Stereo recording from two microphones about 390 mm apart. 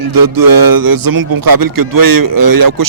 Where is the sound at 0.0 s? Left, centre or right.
Right.